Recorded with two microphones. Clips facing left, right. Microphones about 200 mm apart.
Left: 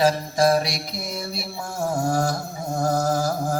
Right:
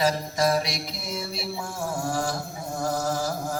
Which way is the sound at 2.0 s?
40° left (ahead or behind).